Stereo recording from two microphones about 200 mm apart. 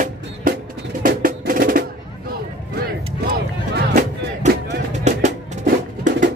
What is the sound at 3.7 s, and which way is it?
Music, 50° right (ahead or behind).